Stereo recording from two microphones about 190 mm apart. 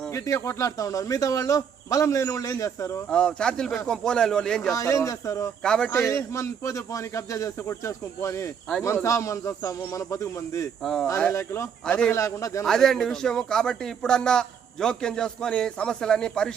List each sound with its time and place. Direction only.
0.1 s speech: 15° left (ahead or behind)
3.1 s speech: 5° left (ahead or behind)
4.7 s speech: 15° left (ahead or behind)
5.6 s speech: 5° left (ahead or behind)
5.9 s speech: 15° left (ahead or behind)
10.8 s speech: 5° left (ahead or behind)
11.2 s speech: 15° left (ahead or behind)
12.1 s speech: 15° left (ahead or behind)
12.6 s speech: centre (ahead or behind)